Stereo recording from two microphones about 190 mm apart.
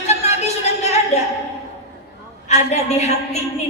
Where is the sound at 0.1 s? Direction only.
35° left (ahead or behind).